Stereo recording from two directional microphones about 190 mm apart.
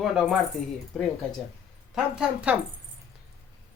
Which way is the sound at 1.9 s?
5° right (ahead or behind).